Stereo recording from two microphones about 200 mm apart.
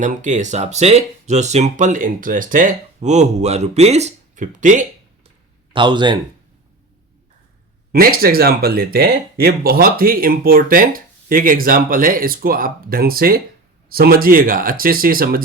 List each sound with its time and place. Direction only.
0.0 s speech: 40° right (ahead or behind)
5.7 s speech: 25° right (ahead or behind)
7.9 s speech: 50° right (ahead or behind)